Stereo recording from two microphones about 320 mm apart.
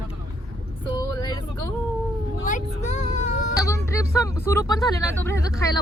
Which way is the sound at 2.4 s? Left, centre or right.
Left.